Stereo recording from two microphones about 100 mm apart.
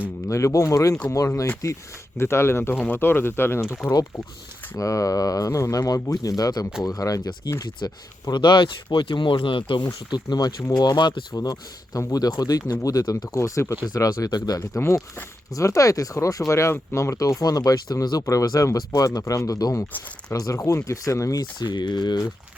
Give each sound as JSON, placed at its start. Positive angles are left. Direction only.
{"t": 0.3, "sound": "speech", "side_deg": 30}
{"t": 4.8, "sound": "speech", "side_deg": 35}
{"t": 8.3, "sound": "speech", "side_deg": 50}
{"t": 14.8, "sound": "speech", "side_deg": 30}